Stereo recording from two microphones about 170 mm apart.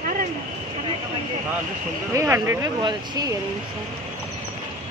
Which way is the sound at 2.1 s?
15° right (ahead or behind).